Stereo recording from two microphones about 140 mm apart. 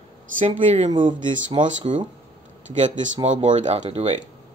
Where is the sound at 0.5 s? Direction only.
50° right (ahead or behind).